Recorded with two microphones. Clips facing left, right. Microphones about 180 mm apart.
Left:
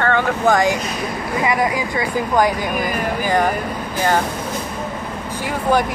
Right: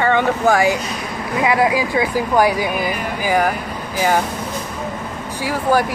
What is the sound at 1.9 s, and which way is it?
Speech, 5° right (ahead or behind).